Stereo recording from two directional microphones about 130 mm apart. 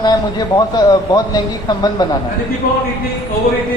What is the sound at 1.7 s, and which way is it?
Speech, 30° left (ahead or behind).